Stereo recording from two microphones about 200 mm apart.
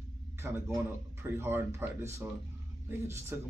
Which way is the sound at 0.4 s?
5° right (ahead or behind).